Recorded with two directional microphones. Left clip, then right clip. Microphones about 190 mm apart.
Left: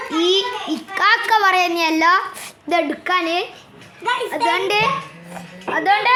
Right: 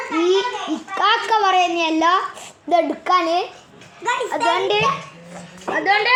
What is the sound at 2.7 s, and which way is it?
A child's voice, centre (ahead or behind).